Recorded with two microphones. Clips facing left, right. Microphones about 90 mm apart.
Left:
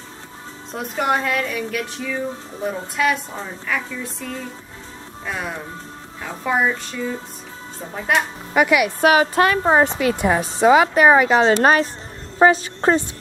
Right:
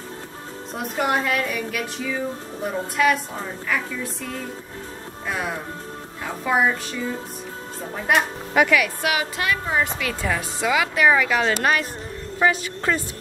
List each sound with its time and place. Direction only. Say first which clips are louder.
0.7 s a woman's voice: left 2 dB; centre (ahead or behind)
8.6 s speech: left 3 dB; 15° left (ahead or behind)
9.0 s a woman's voice: left 9 dB; 40° left (ahead or behind)
9.8 s a woman's voice: left 7 dB; 30° left (ahead or behind)